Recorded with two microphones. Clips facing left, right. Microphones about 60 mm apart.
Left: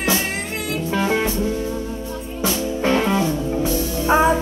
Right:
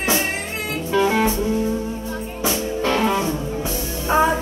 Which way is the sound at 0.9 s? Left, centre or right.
Centre.